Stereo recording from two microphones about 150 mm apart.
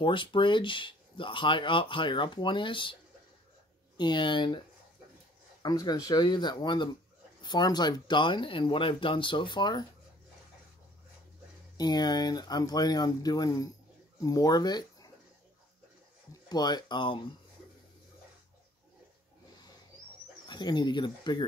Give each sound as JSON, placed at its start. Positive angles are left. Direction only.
{"t": 0.0, "sound": "speech", "side_deg": 35}
{"t": 5.6, "sound": "speech", "side_deg": 25}
{"t": 11.7, "sound": "speech", "side_deg": 30}
{"t": 16.4, "sound": "speech", "side_deg": 30}
{"t": 20.4, "sound": "speech", "side_deg": 30}